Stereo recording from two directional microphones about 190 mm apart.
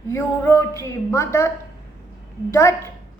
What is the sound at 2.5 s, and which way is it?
Speech, 15° left (ahead or behind).